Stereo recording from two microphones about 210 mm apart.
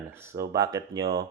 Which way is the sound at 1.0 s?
50° right (ahead or behind).